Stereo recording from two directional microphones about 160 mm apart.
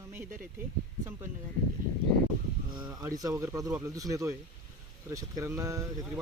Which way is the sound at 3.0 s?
20° right (ahead or behind).